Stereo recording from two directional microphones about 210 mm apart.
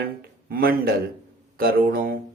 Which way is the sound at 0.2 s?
45° right (ahead or behind).